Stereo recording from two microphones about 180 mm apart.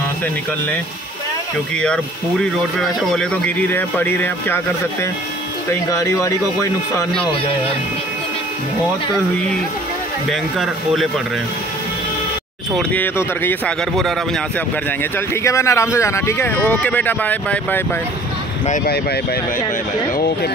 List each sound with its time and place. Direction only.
1.8 s speech: centre (ahead or behind)
5.7 s speech: 20° left (ahead or behind)
10.3 s speech: centre (ahead or behind)
12.7 s speech: 10° left (ahead or behind)
14.9 s speech: 15° left (ahead or behind)